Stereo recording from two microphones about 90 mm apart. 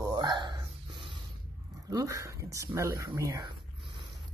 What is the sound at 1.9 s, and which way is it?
Speech, 40° right (ahead or behind).